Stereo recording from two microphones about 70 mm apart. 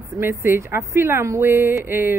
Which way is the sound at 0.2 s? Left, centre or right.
Right.